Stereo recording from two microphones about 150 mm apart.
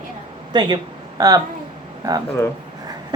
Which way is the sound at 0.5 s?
30° right (ahead or behind).